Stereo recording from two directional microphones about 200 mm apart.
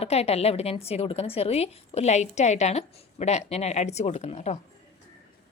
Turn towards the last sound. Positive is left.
turn(degrees=35)  # may be behind; listen again after turning